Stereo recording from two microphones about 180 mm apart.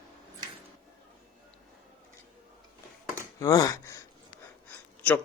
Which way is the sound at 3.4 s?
20° left (ahead or behind).